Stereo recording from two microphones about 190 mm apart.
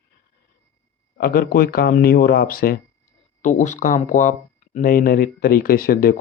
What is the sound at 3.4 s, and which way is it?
Speech, 40° left (ahead or behind).